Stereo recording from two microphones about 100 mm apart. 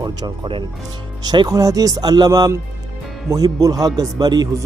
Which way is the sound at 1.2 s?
45° right (ahead or behind).